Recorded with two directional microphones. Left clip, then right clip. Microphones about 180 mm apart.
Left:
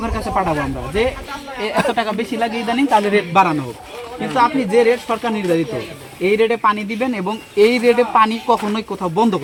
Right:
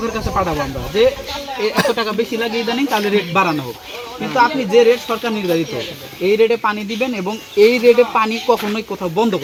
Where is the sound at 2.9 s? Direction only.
25° left (ahead or behind).